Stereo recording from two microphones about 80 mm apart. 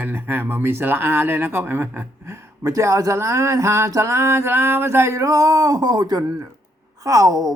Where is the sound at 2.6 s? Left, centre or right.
Right.